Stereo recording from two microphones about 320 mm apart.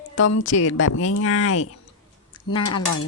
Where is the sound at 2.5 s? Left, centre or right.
Centre.